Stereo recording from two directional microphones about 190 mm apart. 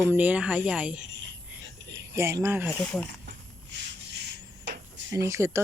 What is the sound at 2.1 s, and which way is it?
Speech, 15° right (ahead or behind).